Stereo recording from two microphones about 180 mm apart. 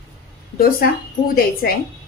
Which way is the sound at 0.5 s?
55° left (ahead or behind).